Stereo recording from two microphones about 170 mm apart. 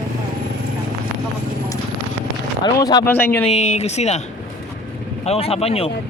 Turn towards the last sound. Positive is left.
turn(degrees=35)  # may be behind; listen again after turning